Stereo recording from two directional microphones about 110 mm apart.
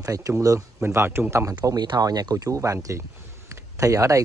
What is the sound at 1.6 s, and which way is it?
Speech, 40° right (ahead or behind).